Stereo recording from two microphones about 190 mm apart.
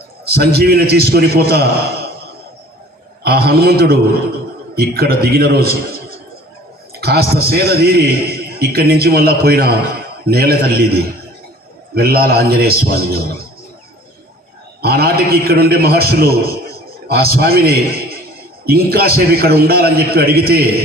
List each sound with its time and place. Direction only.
0.3 s a man's voice: 55° right (ahead or behind)
3.2 s a man's voice: 55° right (ahead or behind)
7.0 s a man's voice: 55° right (ahead or behind)
14.8 s a man's voice: 55° right (ahead or behind)